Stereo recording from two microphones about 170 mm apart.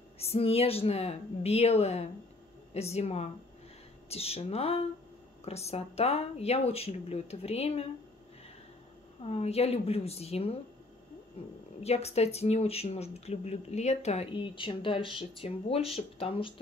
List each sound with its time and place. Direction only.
0.2 s speech: 35° left (ahead or behind)
9.2 s speech: 35° left (ahead or behind)